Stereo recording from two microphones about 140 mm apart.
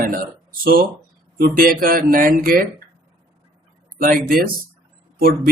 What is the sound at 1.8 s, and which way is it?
Speech, 90° right.